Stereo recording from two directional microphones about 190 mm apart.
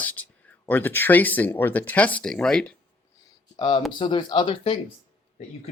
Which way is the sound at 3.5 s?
25° left (ahead or behind).